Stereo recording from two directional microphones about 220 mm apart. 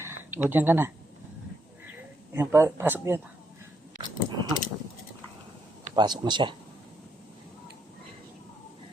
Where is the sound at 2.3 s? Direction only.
10° right (ahead or behind).